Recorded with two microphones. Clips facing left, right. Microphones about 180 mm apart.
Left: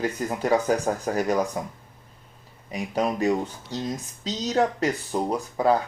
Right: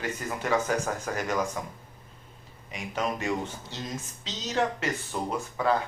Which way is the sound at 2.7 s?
35° left (ahead or behind).